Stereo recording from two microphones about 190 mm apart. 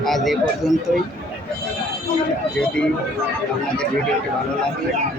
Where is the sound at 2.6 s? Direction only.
5° left (ahead or behind).